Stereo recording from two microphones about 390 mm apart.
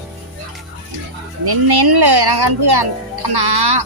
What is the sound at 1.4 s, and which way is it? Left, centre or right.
A child's voice, right.